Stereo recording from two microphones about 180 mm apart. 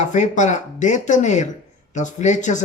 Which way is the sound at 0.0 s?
40° left (ahead or behind).